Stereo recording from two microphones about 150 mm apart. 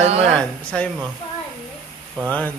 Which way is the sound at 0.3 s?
5° left (ahead or behind).